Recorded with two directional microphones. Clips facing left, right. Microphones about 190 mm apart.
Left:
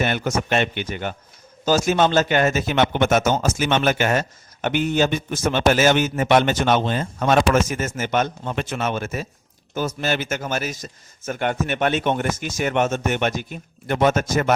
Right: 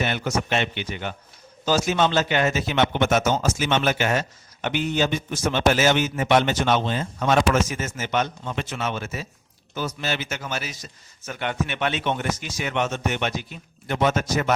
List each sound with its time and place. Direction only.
0.0 s a man's voice: 50° left (ahead or behind)